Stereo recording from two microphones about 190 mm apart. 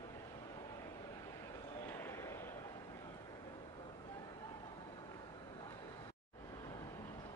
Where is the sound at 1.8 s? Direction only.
10° left (ahead or behind).